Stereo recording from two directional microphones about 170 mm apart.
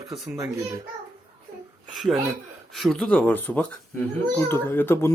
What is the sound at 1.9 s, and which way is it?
Speech, centre (ahead or behind).